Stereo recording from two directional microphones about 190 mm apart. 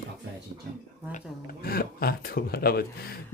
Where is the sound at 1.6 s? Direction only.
50° left (ahead or behind).